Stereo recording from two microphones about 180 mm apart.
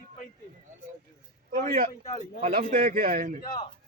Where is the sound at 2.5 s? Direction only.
50° right (ahead or behind).